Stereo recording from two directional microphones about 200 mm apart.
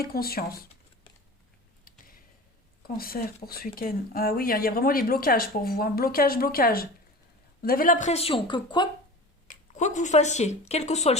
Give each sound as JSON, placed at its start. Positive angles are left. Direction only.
{"t": 0.0, "sound": "speech", "side_deg": 50}
{"t": 2.8, "sound": "speech", "side_deg": 50}
{"t": 9.5, "sound": "speech", "side_deg": 35}